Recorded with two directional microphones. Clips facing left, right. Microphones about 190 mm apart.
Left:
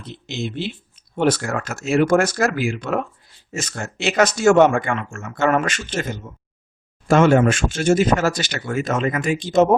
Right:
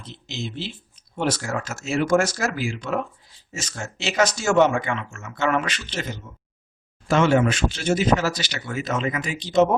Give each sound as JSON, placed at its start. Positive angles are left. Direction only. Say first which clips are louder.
{"t": 0.0, "sound": "speech", "louder": "left 5 dB", "side_deg": 55}